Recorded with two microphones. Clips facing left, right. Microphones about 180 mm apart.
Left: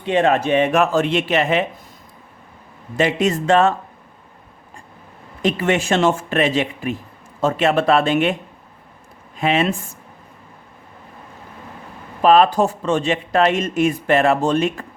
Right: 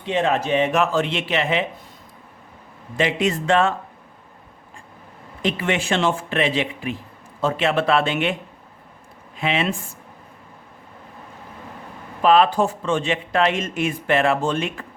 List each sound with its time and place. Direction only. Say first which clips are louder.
0.0 s speech: left 4 dB; 60° left (ahead or behind)
3.0 s speech: left 3 dB; 40° left (ahead or behind)
5.4 s speech: left 4 dB; 45° left (ahead or behind)
9.4 s speech: left 4 dB; 40° left (ahead or behind)
12.2 s speech: left 3 dB; 40° left (ahead or behind)